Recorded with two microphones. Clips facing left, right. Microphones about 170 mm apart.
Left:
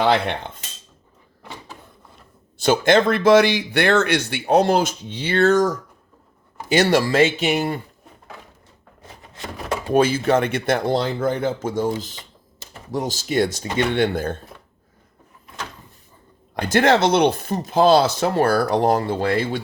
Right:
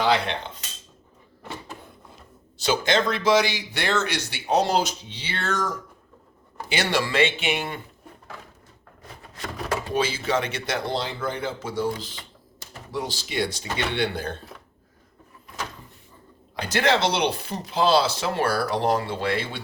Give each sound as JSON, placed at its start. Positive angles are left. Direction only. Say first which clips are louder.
{"t": 0.0, "sound": "speech", "louder": "left 4 dB", "side_deg": 55}
{"t": 2.6, "sound": "speech", "louder": "left 7 dB", "side_deg": 50}
{"t": 9.3, "sound": "drawer open or close", "louder": "left 2 dB", "side_deg": 20}
{"t": 9.9, "sound": "speech", "louder": "left 9 dB", "side_deg": 50}
{"t": 16.6, "sound": "speech", "louder": "left 6 dB", "side_deg": 50}